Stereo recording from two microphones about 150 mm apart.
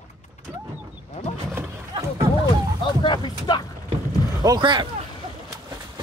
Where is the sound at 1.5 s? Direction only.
15° right (ahead or behind).